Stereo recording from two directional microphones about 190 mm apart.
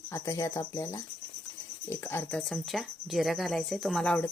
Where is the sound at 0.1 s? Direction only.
15° left (ahead or behind).